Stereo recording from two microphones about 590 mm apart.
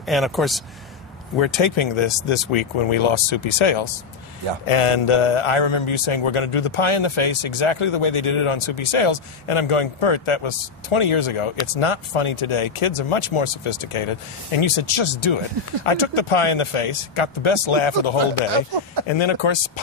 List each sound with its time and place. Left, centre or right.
0.0 s speech: centre
1.4 s a man's voice: left